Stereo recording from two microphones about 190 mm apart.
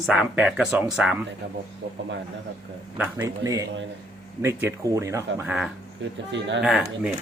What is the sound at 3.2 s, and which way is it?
Speech, 20° right (ahead or behind).